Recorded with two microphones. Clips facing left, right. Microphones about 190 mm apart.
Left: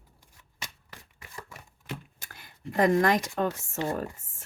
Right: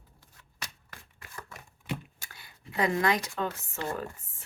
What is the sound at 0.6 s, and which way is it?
Shuffling cards, 15° left (ahead or behind).